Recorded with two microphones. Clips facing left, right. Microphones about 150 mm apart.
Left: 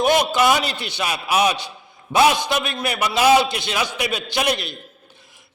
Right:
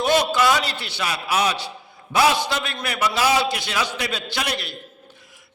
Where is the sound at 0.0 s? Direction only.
15° left (ahead or behind).